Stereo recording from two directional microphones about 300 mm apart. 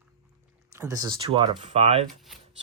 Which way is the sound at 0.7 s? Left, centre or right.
Centre.